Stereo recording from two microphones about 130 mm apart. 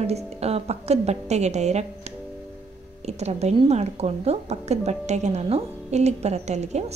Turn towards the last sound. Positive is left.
turn(degrees=-60)  # may be behind; listen again after turning